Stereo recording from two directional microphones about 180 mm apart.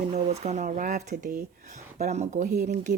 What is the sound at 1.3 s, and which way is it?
Speech, 45° right (ahead or behind).